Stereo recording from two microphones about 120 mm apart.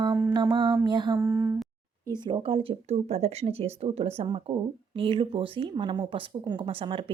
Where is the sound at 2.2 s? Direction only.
40° right (ahead or behind).